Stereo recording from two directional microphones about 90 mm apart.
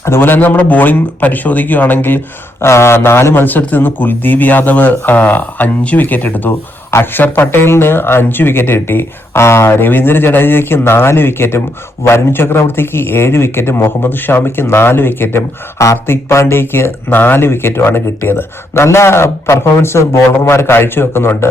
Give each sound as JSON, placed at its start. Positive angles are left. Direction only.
{"t": 0.0, "sound": "a man's voice", "side_deg": 25}